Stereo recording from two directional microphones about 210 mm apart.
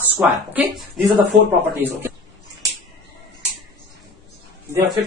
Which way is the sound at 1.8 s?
10° right (ahead or behind).